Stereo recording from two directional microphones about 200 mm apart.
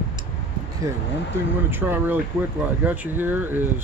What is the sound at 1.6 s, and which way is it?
Speech, 10° right (ahead or behind).